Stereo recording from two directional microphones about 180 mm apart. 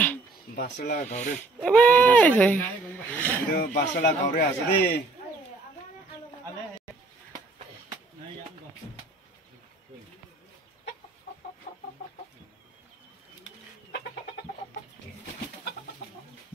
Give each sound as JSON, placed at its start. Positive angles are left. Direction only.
{"t": 0.6, "sound": "speech", "side_deg": 50}
{"t": 1.6, "sound": "speech", "side_deg": 5}
{"t": 3.5, "sound": "speech", "side_deg": 50}